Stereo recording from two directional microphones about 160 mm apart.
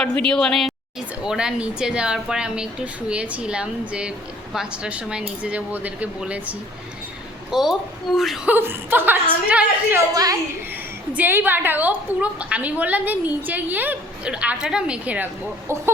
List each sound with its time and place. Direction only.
0.0 s a woman's voice: 5° left (ahead or behind)
8.5 s a woman's voice: 15° right (ahead or behind)
10.2 s a woman's voice: 20° right (ahead or behind)
11.1 s a woman's voice: 10° right (ahead or behind)